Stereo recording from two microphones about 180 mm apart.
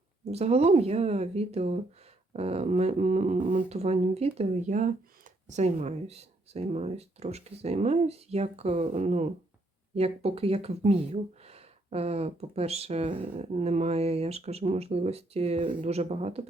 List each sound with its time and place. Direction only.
0.3 s speech: 35° right (ahead or behind)